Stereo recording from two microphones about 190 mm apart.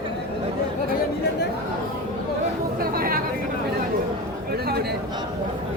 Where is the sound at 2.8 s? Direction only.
50° right (ahead or behind).